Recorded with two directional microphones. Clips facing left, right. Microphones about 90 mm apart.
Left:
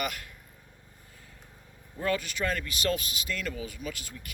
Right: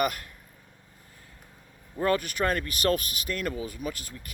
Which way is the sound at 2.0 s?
45° right (ahead or behind).